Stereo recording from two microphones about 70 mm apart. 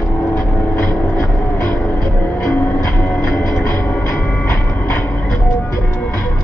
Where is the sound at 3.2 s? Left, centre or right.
Left.